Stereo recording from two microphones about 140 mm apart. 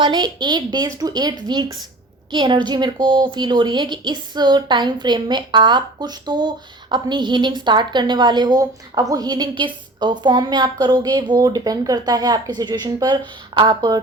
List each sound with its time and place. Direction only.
0.0 s a woman's voice: 30° right (ahead or behind)